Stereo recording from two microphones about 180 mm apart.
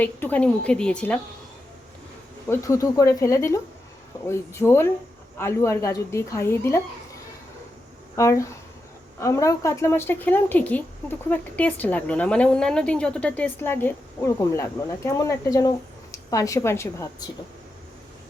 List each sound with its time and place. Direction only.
0.0 s a woman's voice: 10° left (ahead or behind)
2.5 s a woman's voice: 15° left (ahead or behind)
8.1 s a woman's voice: 15° left (ahead or behind)